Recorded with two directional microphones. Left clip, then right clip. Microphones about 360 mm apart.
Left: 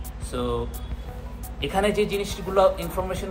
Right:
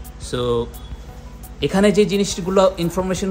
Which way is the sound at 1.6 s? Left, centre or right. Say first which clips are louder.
Right 7 dB; right.